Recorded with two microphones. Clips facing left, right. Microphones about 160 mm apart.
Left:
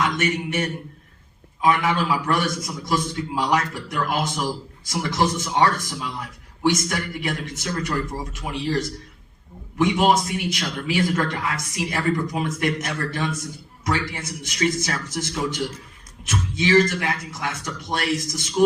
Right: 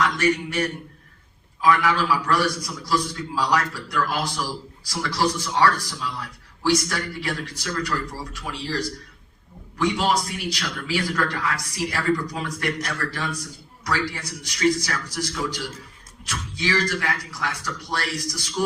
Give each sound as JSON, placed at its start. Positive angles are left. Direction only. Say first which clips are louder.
{"t": 0.0, "sound": "a man's voice", "louder": "right 1 dB", "side_deg": 25}